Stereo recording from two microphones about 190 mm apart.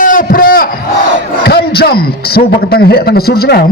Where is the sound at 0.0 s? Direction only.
45° left (ahead or behind).